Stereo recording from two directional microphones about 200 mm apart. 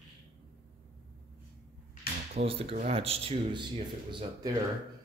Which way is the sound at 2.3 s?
30° right (ahead or behind).